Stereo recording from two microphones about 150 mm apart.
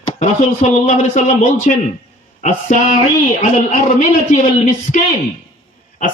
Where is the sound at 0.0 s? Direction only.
50° left (ahead or behind).